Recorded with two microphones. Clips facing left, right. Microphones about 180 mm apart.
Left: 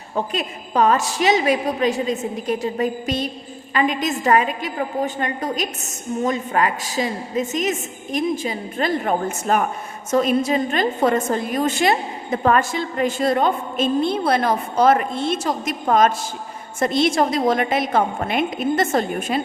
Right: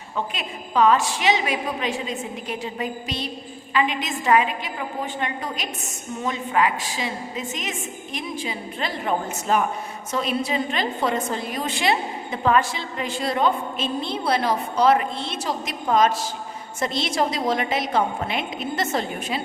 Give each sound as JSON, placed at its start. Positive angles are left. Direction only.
{"t": 0.3, "sound": "a woman's voice", "side_deg": 45}